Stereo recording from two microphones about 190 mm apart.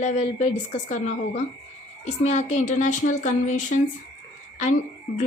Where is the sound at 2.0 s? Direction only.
35° left (ahead or behind).